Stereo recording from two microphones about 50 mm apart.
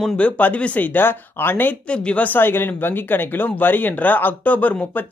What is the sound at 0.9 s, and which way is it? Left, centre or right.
Speech, left.